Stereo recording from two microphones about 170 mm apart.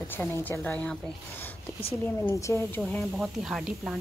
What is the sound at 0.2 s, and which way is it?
Speech, 10° left (ahead or behind).